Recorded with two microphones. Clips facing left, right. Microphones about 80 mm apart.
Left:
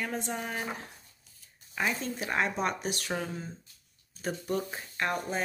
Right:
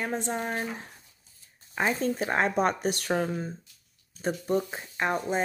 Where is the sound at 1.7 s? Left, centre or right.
Right.